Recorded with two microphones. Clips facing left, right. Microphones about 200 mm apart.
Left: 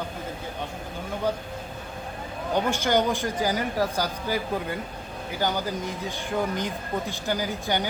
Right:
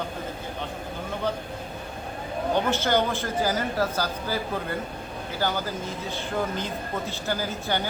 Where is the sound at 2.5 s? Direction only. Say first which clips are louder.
Left 1 dB; 15° left (ahead or behind).